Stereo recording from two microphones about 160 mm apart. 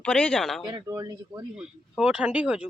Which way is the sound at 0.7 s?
25° right (ahead or behind).